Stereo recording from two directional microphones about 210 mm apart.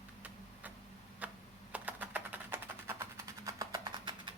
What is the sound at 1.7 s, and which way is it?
Music, 10° right (ahead or behind).